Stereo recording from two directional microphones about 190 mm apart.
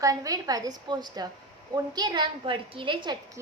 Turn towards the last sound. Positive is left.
turn(degrees=-25)  # may be behind; listen again after turning